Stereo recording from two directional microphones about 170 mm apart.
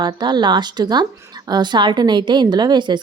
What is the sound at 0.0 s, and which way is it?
A woman's voice, 25° right (ahead or behind).